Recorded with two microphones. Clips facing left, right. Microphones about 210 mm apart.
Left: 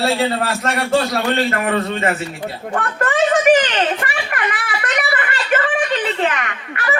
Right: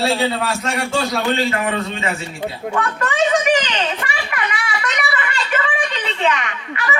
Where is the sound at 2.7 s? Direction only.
50° left (ahead or behind).